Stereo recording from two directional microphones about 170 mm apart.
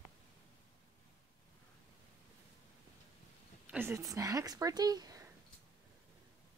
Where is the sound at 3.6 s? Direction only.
10° right (ahead or behind).